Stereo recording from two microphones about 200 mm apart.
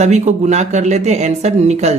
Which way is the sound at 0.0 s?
35° right (ahead or behind).